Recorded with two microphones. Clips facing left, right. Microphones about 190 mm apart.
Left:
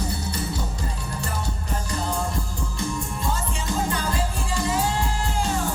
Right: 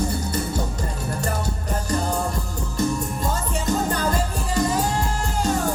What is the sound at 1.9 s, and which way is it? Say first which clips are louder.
Music: right 4 dB; 45° right (ahead or behind).